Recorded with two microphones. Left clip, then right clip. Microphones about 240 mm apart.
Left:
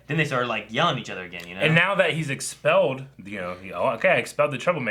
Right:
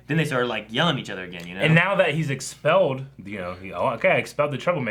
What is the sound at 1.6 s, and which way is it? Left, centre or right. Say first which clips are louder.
Speech: even; right.